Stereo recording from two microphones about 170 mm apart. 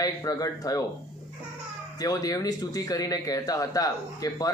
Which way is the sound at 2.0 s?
20° left (ahead or behind).